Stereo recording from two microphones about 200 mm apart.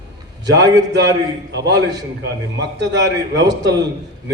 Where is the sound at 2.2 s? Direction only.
60° right (ahead or behind).